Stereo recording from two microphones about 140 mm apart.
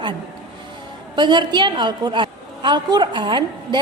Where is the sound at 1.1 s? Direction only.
35° right (ahead or behind).